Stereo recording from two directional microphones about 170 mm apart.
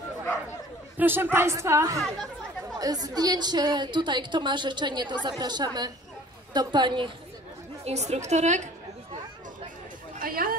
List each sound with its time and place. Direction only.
0.9 s a woman's voice: 10° right (ahead or behind)
7.8 s a woman's voice: 40° right (ahead or behind)
10.1 s chatter: 60° right (ahead or behind)